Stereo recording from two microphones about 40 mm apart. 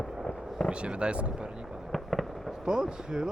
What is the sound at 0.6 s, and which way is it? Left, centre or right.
Speech, right.